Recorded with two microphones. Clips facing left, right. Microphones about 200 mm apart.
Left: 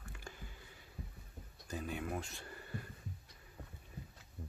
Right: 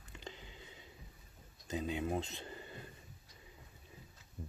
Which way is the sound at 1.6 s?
20° right (ahead or behind).